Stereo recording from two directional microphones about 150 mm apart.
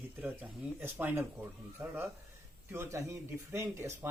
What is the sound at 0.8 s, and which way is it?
Speech, 15° right (ahead or behind).